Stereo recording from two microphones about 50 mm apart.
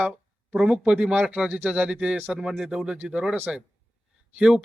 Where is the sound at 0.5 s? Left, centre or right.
Centre.